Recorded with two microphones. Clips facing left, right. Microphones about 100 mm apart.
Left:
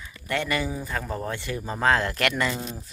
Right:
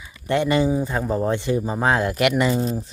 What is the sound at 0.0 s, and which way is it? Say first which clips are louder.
A man's voice: right 7 dB; 20° right (ahead or behind).